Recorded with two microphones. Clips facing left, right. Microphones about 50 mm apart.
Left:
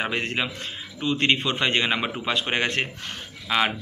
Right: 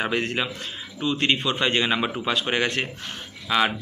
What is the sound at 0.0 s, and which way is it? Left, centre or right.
A man's voice, left.